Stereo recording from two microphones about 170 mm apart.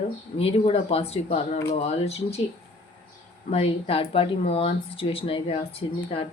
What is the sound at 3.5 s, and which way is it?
Speech, 35° left (ahead or behind).